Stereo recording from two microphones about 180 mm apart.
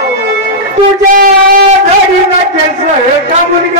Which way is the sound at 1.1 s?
50° right (ahead or behind).